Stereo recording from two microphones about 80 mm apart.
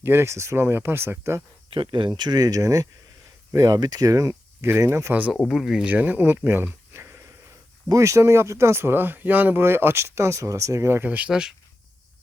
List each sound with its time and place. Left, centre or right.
0.0 s speech: right
1.8 s speech: right
2.4 s speech: right
3.8 s speech: right
5.5 s speech: centre
5.9 s speech: right
6.9 s sniff: right
7.9 s speech: right
11.1 s speech: centre